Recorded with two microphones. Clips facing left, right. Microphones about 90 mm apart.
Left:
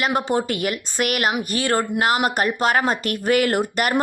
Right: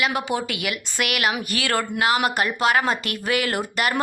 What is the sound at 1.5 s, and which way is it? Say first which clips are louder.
A woman's voice: left 3 dB; 30° left (ahead or behind).